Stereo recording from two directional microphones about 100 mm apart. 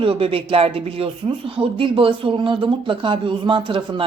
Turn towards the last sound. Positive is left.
turn(degrees=-55)  # may be behind; listen again after turning